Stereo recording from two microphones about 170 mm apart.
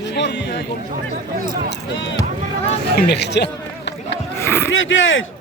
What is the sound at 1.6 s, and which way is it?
Speech, 90° left.